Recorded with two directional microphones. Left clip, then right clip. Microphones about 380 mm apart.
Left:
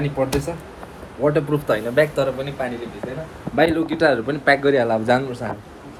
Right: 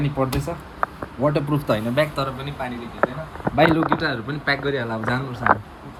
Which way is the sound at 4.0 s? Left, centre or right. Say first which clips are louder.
Left 8 dB; centre.